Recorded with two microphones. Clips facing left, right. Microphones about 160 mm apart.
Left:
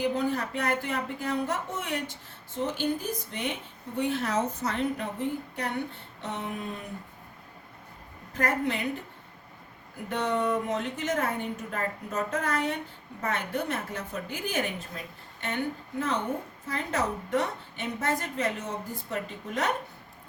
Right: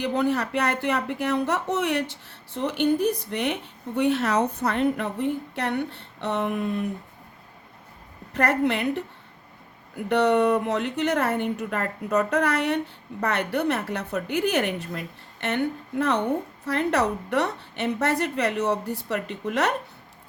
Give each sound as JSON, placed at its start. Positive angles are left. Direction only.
{"t": 0.0, "sound": "speech", "side_deg": -75}
{"t": 5.5, "sound": "speech", "side_deg": -75}
{"t": 8.3, "sound": "speech", "side_deg": -70}
{"t": 10.1, "sound": "speech", "side_deg": -70}